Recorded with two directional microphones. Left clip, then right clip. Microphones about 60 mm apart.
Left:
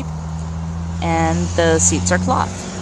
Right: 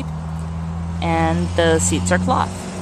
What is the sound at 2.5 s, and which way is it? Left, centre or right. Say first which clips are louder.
Music: left 1 dB; left.